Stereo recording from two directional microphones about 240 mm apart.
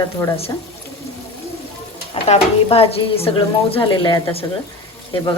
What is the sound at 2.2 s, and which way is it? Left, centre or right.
A woman's voice, left.